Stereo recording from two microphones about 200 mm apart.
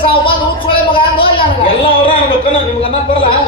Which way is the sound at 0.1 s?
25° left (ahead or behind).